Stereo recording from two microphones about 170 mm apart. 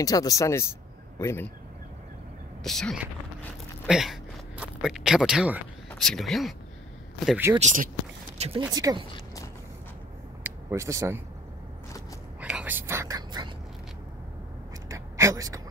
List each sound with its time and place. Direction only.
0.0 s speech: 20° left (ahead or behind)
2.6 s speech: centre (ahead or behind)
7.2 s speech: 10° right (ahead or behind)
7.6 s speech: 50° right (ahead or behind)
8.4 s speech: 35° right (ahead or behind)
8.7 s speech: 20° right (ahead or behind)
10.4 s speech: 15° right (ahead or behind)
12.4 s whispering: 5° right (ahead or behind); by 13.5 s 25° right (ahead or behind)
14.9 s a sound: 15° right (ahead or behind)